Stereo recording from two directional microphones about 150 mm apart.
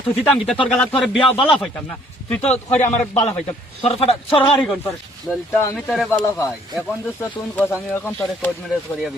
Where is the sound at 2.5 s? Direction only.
50° left (ahead or behind).